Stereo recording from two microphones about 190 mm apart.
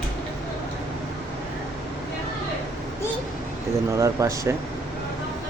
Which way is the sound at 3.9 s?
15° right (ahead or behind).